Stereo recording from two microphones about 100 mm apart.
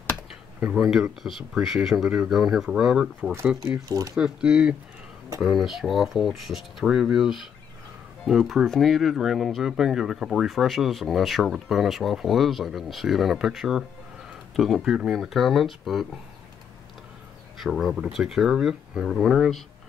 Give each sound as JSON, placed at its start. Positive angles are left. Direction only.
{"t": 0.7, "sound": "speech", "side_deg": -5}
{"t": 3.9, "sound": "speech", "side_deg": -35}
{"t": 4.2, "sound": "speech", "side_deg": -10}
{"t": 17.6, "sound": "speech", "side_deg": 0}